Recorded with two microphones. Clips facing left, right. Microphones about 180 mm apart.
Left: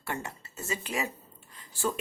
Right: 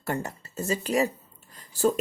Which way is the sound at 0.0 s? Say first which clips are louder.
Right 6 dB; 40° right (ahead or behind).